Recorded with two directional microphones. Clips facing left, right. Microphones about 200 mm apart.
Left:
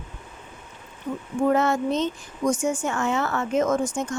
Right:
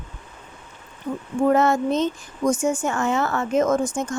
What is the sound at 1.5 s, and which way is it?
A woman's voice, 45° right (ahead or behind).